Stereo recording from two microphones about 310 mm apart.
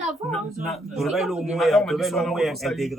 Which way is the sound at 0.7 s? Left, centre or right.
Centre.